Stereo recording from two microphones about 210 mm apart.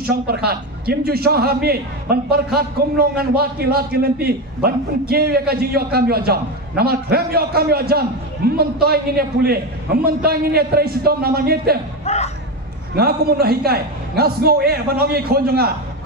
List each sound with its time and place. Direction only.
0.1 s a man's voice: 50° right (ahead or behind)
12.0 s a sound: 30° left (ahead or behind)
12.9 s a man's voice: 45° right (ahead or behind)